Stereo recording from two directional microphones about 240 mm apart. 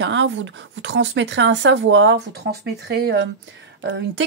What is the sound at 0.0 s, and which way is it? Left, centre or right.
Speech, right.